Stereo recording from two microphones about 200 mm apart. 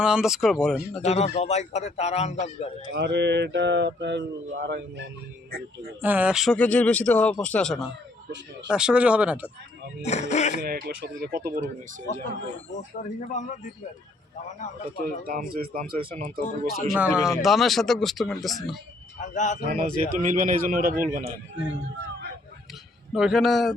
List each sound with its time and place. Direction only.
0.0 s speech: 5° right (ahead or behind)
1.0 s a man's voice: 35° left (ahead or behind)
2.9 s speech: 60° right (ahead or behind)
6.0 s speech: 5° right (ahead or behind)
10.0 s a man's voice: 35° left (ahead or behind)
10.6 s speech: 50° right (ahead or behind)
13.0 s a man's voice: 40° left (ahead or behind)
15.0 s speech: 45° right (ahead or behind)
16.9 s speech: 5° right (ahead or behind)
19.3 s a man's voice: 40° left (ahead or behind)
19.6 s speech: 40° right (ahead or behind)
23.1 s speech: centre (ahead or behind)